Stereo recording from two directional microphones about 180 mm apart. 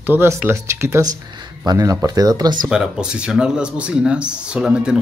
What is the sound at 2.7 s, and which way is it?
Speech, 5° right (ahead or behind).